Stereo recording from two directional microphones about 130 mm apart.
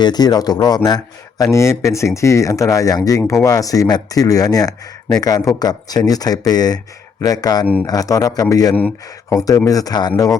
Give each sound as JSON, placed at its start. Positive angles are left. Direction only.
{"t": 0.0, "sound": "speech", "side_deg": 30}